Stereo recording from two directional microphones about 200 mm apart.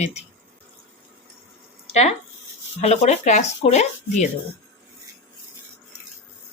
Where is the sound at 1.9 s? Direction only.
35° left (ahead or behind).